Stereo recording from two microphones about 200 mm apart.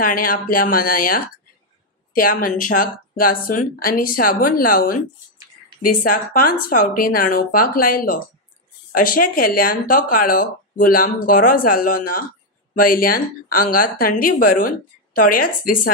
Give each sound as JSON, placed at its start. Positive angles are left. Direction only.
{"t": 0.0, "sound": "speech", "side_deg": 45}